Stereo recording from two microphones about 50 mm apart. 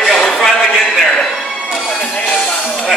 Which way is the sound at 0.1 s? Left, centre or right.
Centre.